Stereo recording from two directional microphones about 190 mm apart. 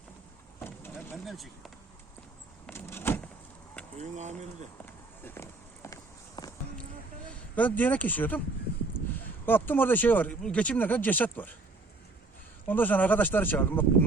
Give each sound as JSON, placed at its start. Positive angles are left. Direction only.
{"t": 0.6, "sound": "vehicle", "side_deg": 10}
{"t": 1.1, "sound": "speech", "side_deg": 0}
{"t": 2.6, "sound": "power windows", "side_deg": 10}
{"t": 3.9, "sound": "speech", "side_deg": -40}
{"t": 5.2, "sound": "a sound", "side_deg": 15}
{"t": 7.5, "sound": "speech", "side_deg": 10}
{"t": 12.6, "sound": "speech", "side_deg": 10}